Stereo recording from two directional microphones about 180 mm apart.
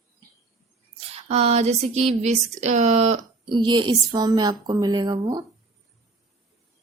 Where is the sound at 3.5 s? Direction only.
25° right (ahead or behind).